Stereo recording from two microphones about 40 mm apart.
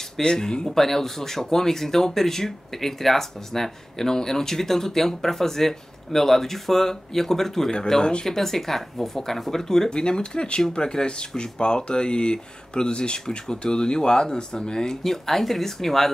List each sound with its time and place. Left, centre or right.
0.2 s speech: centre
0.7 s speech: centre
15.0 s speech: centre